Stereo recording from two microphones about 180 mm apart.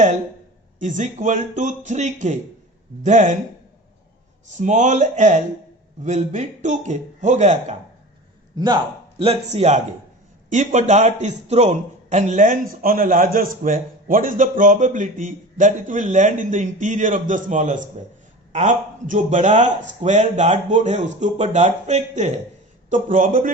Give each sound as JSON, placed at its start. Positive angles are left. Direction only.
{"t": 0.8, "sound": "a man's voice", "side_deg": -45}
{"t": 4.5, "sound": "a man's voice", "side_deg": -40}
{"t": 8.5, "sound": "a man's voice", "side_deg": -25}